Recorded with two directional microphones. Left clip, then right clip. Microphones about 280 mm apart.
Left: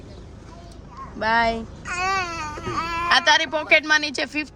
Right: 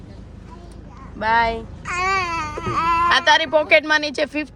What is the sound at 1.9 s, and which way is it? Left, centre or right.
Babbling, right.